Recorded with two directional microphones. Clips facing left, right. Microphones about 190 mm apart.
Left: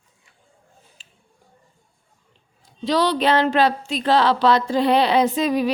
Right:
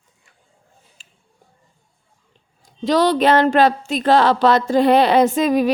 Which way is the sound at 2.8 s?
45° right (ahead or behind).